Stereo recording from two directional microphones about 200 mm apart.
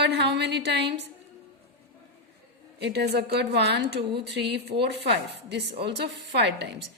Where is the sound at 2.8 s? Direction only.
55° right (ahead or behind).